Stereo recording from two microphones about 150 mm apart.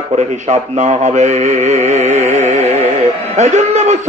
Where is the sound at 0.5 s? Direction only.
50° right (ahead or behind).